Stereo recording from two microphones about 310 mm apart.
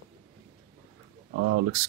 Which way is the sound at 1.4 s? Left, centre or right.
Right.